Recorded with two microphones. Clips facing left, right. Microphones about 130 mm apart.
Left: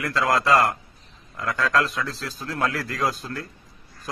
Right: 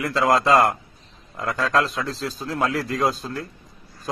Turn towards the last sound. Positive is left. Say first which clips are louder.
# right 3 dB
turn(degrees=-25)  # may be behind; listen again after turning